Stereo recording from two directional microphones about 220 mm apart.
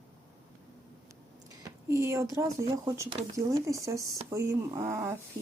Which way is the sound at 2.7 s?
15° right (ahead or behind).